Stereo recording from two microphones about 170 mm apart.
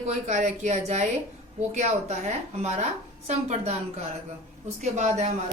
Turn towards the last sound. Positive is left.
turn(degrees=-40)  # may be behind; listen again after turning